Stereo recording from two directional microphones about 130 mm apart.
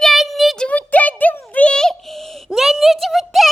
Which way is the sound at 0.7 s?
10° left (ahead or behind).